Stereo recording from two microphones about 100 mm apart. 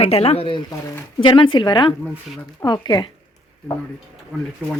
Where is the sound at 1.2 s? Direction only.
55° left (ahead or behind).